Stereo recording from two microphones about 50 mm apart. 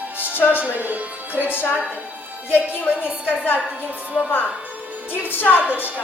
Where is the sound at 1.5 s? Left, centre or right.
Left.